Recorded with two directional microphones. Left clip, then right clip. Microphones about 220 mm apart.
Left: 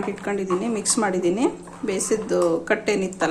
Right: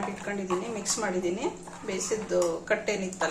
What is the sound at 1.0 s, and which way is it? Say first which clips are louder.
Speech: left 8 dB; 45° left (ahead or behind).